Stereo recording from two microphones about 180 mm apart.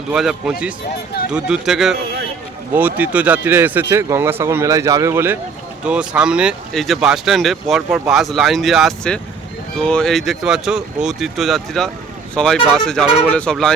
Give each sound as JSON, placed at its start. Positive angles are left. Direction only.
{"t": 0.1, "sound": "speech", "side_deg": -5}